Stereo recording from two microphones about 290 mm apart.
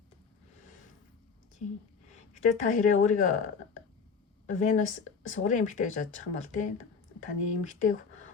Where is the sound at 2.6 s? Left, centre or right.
Left.